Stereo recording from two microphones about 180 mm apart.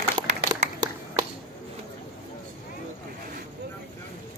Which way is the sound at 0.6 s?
40° right (ahead or behind).